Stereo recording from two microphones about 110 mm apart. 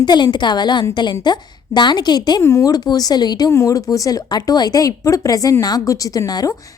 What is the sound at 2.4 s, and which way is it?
A woman's voice, 30° left (ahead or behind).